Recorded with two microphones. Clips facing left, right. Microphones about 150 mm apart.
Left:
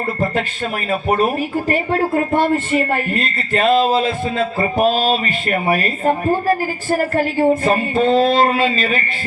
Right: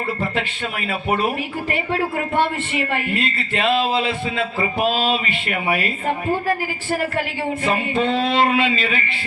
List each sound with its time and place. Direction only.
0.9 s speech: 40° left (ahead or behind)